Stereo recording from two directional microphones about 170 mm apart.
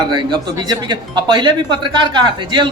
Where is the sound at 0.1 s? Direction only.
25° right (ahead or behind).